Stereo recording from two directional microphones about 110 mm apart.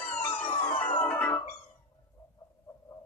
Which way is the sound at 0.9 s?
15° left (ahead or behind).